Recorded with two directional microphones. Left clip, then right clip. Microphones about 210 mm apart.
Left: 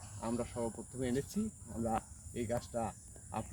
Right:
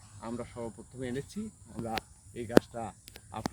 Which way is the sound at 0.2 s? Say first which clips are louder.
Left 1 dB; centre (ahead or behind).